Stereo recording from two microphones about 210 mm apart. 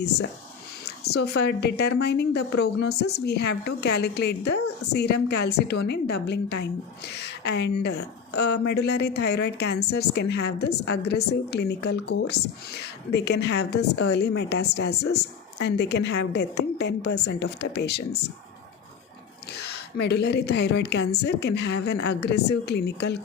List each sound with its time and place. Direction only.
0.9 s speech: 50° left (ahead or behind)
19.5 s speech: 50° left (ahead or behind)